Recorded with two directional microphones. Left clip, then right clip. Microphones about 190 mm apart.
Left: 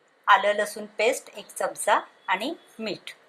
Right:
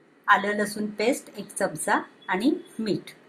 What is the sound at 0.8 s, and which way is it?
Speech, 90° left.